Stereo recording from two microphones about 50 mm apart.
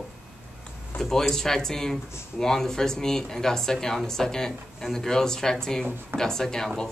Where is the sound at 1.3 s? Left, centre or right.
Centre.